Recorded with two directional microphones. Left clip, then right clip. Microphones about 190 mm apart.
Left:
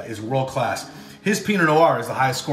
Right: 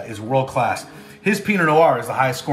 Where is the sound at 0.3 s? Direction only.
5° right (ahead or behind).